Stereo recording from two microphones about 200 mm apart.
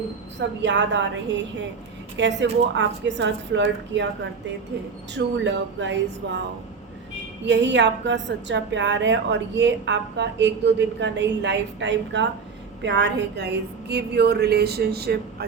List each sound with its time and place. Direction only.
0.3 s a woman's voice: 65° right (ahead or behind)
7.4 s a woman's voice: 65° right (ahead or behind)